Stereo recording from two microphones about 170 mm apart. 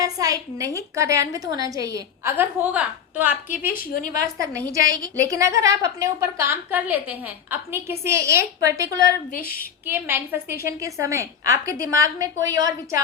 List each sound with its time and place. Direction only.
0.0 s a woman's voice: 20° right (ahead or behind)
3.7 s a woman's voice: 55° left (ahead or behind)
4.7 s a woman's voice: 20° right (ahead or behind)
9.3 s a woman's voice: 60° left (ahead or behind)
9.8 s a woman's voice: 10° right (ahead or behind)